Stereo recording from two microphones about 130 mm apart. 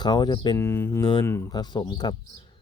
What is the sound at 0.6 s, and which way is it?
Speech, 20° left (ahead or behind).